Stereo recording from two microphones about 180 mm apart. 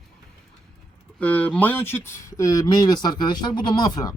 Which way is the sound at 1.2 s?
10° left (ahead or behind).